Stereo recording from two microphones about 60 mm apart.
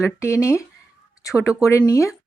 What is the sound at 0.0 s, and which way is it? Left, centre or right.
Speech, left.